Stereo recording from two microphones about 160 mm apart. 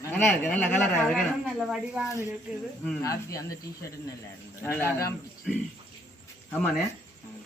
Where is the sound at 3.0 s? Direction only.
20° left (ahead or behind).